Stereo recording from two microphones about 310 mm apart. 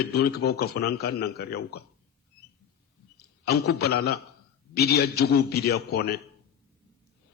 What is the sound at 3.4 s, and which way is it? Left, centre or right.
A man's voice, left.